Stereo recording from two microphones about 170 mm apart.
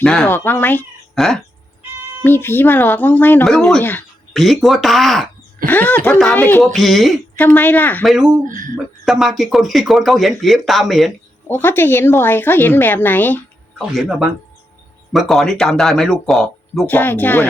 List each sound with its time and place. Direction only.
0.0 s a woman's voice: 5° left (ahead or behind)
8.0 s speech: 5° right (ahead or behind)
8.4 s speech: 50° right (ahead or behind)
9.0 s speech: centre (ahead or behind)
11.4 s a woman's voice: 10° left (ahead or behind)
13.7 s speech: centre (ahead or behind)